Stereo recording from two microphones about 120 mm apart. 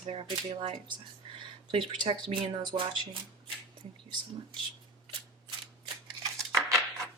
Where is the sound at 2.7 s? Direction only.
50° right (ahead or behind).